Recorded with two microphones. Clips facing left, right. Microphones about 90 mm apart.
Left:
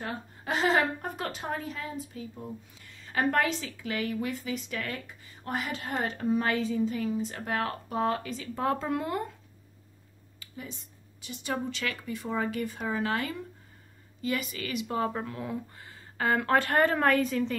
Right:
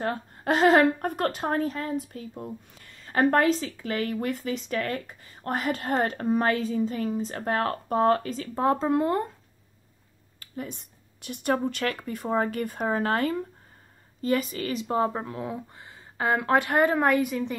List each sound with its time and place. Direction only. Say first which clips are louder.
0.0 s speech: right 7 dB; 50° right (ahead or behind)
8.5 s speech: right 6 dB; 30° right (ahead or behind)
10.4 s speech: right 6 dB; 50° right (ahead or behind); by 17.6 s 15° right (ahead or behind)